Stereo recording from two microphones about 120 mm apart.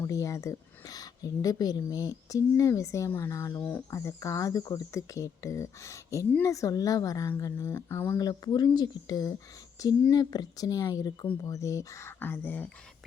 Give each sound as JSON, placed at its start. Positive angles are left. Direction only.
{"t": 0.0, "sound": "speech", "side_deg": 25}
{"t": 3.6, "sound": "speech", "side_deg": 10}
{"t": 3.9, "sound": "speech", "side_deg": 25}
{"t": 8.2, "sound": "a woman's voice", "side_deg": 35}